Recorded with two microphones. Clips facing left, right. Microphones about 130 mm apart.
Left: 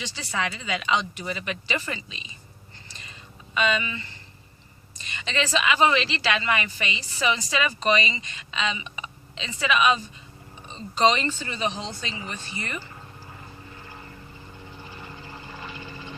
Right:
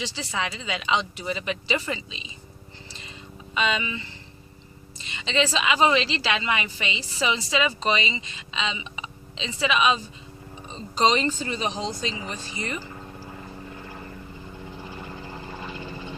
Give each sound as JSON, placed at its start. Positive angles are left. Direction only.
{"t": 0.3, "sound": "speech", "side_deg": -25}
{"t": 3.5, "sound": "speech", "side_deg": -25}
{"t": 5.2, "sound": "speech", "side_deg": -25}